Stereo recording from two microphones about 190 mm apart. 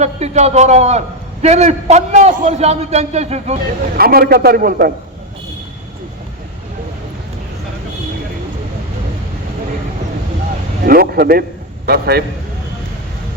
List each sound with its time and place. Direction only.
0.0 s a man's voice: 35° right (ahead or behind)
3.9 s a man's voice: 50° right (ahead or behind)
10.8 s a man's voice: 50° right (ahead or behind)